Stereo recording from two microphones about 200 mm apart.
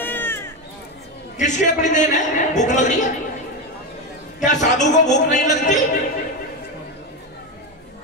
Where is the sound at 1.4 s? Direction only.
35° left (ahead or behind).